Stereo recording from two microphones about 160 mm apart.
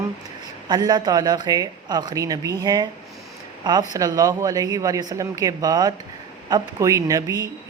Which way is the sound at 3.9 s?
20° right (ahead or behind).